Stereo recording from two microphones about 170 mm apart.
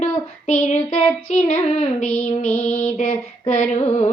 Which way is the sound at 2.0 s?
5° left (ahead or behind).